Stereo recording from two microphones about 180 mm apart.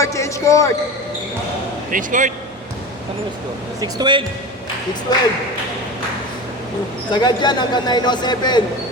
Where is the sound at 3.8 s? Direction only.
25° right (ahead or behind).